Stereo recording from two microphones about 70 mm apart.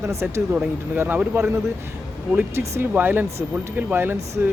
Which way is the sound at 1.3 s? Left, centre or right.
Right.